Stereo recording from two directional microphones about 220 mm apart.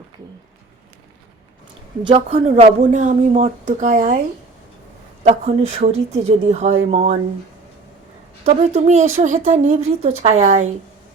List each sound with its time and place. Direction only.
2.0 s speech: 25° right (ahead or behind)
5.2 s speech: 30° right (ahead or behind)
8.4 s speech: 30° right (ahead or behind)